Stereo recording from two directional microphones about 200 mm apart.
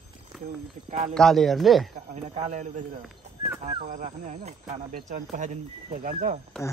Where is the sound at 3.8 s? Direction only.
40° right (ahead or behind).